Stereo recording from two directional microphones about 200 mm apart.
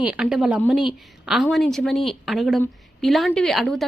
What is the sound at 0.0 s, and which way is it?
A woman's voice, 5° right (ahead or behind).